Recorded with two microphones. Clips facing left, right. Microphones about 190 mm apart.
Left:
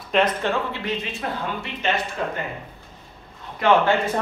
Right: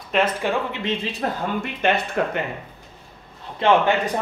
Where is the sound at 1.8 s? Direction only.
55° right (ahead or behind).